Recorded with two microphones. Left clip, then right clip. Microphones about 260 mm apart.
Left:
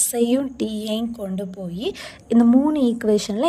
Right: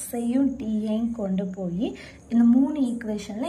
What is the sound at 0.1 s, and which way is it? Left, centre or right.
A woman's voice, left.